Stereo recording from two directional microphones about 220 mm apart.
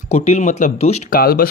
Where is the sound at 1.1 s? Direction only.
40° left (ahead or behind).